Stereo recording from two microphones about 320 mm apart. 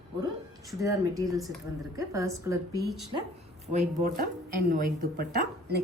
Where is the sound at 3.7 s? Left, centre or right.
Right.